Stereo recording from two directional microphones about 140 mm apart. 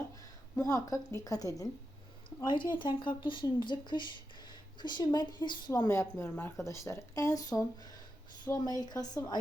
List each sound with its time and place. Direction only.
0.6 s a woman's voice: 25° left (ahead or behind)